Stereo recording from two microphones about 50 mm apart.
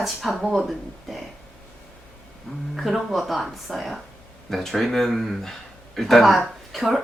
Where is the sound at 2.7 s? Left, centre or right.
Centre.